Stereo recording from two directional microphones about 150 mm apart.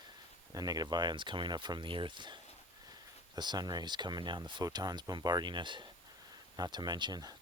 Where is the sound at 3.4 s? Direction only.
30° right (ahead or behind).